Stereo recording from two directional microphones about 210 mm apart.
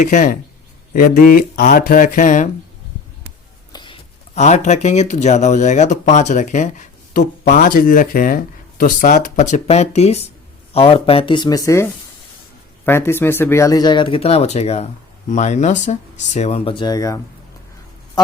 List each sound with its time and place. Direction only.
0.0 s speech: 35° left (ahead or behind)
3.7 s speech: 20° left (ahead or behind)